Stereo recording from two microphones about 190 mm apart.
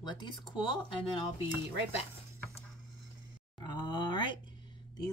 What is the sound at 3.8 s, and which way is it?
Groan, 25° left (ahead or behind).